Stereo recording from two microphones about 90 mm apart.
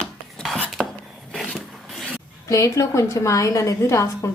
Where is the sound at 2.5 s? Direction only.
40° left (ahead or behind).